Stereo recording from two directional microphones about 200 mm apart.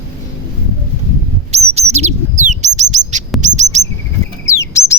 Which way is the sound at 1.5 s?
30° right (ahead or behind).